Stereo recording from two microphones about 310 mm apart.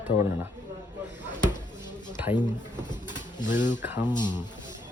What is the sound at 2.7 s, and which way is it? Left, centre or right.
Pigeon, centre.